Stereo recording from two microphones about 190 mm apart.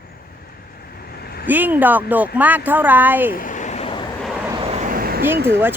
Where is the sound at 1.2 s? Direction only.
55° left (ahead or behind).